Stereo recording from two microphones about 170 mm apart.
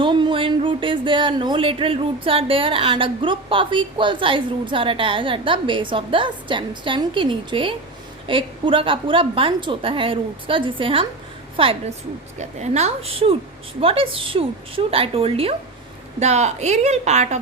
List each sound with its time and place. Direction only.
0.0 s a woman's voice: 30° right (ahead or behind)